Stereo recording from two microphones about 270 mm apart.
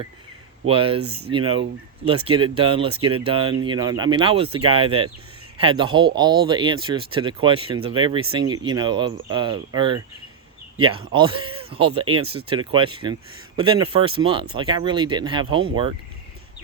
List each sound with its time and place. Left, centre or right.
0.7 s speech: centre